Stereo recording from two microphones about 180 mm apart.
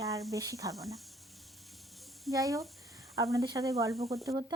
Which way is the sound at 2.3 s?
20° right (ahead or behind).